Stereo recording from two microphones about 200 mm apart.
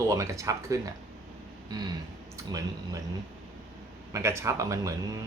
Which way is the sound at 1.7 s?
20° right (ahead or behind).